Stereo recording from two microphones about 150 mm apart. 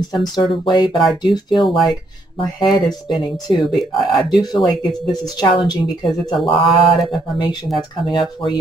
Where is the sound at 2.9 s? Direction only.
25° left (ahead or behind).